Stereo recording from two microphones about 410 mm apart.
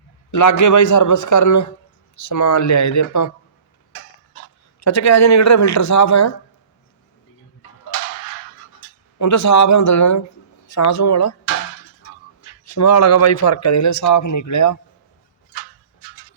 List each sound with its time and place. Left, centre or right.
0.3 s a man's voice: left
4.8 s speech: left
9.1 s speech: left
12.6 s speech: left